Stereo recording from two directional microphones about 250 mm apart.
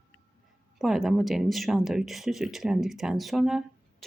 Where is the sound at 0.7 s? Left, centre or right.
Centre.